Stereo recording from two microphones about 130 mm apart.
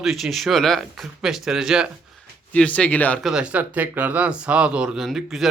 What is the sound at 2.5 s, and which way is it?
Speech, 10° left (ahead or behind).